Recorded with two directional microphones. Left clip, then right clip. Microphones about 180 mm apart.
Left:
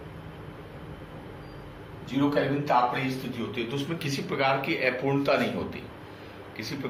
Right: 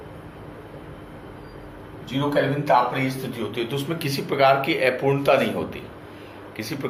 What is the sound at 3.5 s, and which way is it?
Speech, 35° right (ahead or behind).